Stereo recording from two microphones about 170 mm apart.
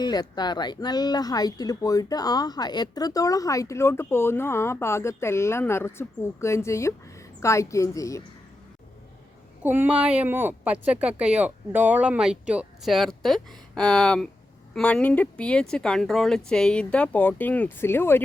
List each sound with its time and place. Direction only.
0.0 s speech: 25° left (ahead or behind)
9.6 s speech: 10° right (ahead or behind); by 18.2 s 15° left (ahead or behind)